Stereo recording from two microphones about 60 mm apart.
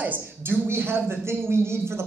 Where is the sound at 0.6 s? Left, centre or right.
Right.